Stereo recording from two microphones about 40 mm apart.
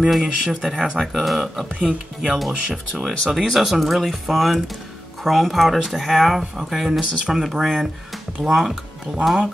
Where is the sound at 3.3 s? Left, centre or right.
Centre.